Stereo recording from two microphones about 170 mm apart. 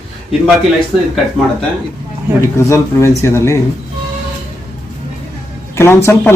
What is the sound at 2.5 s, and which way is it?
A woman's voice, 15° left (ahead or behind).